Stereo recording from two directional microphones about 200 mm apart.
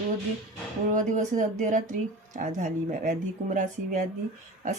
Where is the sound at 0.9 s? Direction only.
40° right (ahead or behind).